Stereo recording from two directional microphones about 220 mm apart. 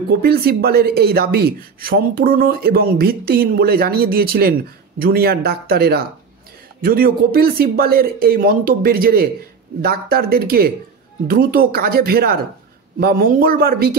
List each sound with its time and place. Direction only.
0.2 s speech: 45° right (ahead or behind)